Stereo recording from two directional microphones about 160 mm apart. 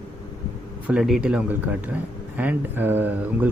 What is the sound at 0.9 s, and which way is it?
Speech, 5° right (ahead or behind).